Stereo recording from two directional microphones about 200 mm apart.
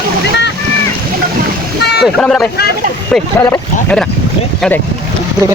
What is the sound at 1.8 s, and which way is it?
Boat, 55° left (ahead or behind).